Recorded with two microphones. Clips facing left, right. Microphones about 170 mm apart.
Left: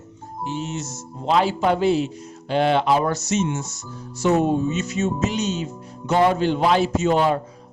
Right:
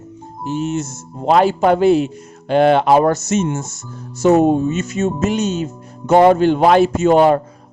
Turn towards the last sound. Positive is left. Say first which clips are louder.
# right 7 dB
turn(degrees=-55)  # may be behind; listen again after turning